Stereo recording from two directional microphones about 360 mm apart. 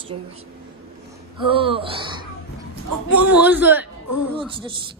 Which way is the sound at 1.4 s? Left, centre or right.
Centre.